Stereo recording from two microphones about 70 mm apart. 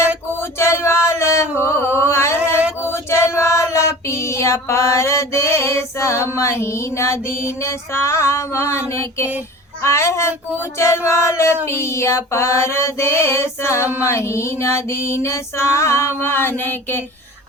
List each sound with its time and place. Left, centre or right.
0.6 s chant: left
2.8 s female singing: left
9.8 s speech: left
10.8 s female singing: left